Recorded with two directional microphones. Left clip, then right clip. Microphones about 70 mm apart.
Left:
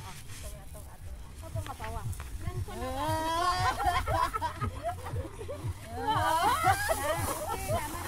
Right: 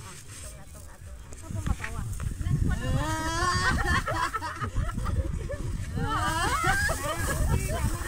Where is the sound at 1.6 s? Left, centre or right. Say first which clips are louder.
Right 2 dB; centre.